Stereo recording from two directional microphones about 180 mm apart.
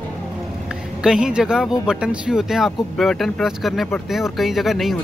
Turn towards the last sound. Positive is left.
turn(degrees=0)  # may be behind; listen again after turning